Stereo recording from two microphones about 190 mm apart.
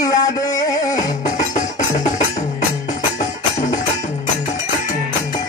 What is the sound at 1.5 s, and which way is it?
Music, 40° left (ahead or behind).